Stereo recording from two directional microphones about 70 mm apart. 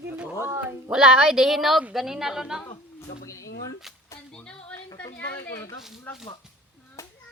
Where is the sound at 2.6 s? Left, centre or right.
Left.